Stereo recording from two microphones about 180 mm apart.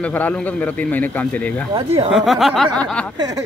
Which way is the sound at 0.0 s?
10° left (ahead or behind).